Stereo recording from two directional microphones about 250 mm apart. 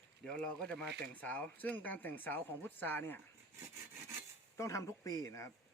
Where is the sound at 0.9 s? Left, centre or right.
Right.